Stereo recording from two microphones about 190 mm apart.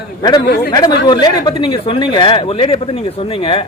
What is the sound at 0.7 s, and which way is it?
Speech, 20° left (ahead or behind).